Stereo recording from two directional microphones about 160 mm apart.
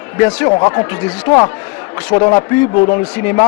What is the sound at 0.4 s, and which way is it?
Speech, 20° left (ahead or behind).